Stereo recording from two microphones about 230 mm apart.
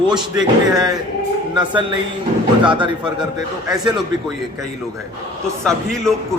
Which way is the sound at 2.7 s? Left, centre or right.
Right.